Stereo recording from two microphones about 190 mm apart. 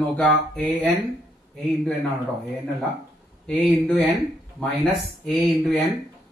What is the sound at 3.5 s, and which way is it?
Speech, 5° left (ahead or behind).